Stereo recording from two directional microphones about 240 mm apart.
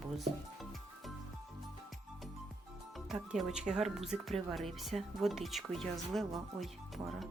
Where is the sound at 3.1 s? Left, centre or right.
Centre.